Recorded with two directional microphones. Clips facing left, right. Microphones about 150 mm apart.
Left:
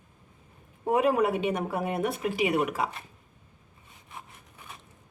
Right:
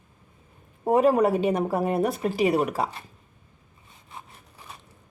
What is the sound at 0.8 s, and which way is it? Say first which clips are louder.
Speech: right 4 dB; 35° right (ahead or behind).